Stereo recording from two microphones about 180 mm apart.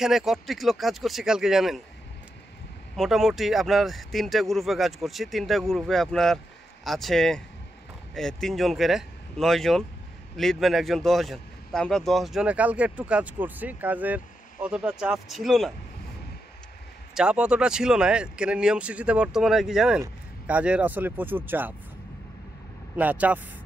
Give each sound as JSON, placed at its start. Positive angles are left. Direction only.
{"t": 0.0, "sound": "speech", "side_deg": 0}
{"t": 3.0, "sound": "speech", "side_deg": 0}
{"t": 17.1, "sound": "speech", "side_deg": -5}
{"t": 22.9, "sound": "speech", "side_deg": -10}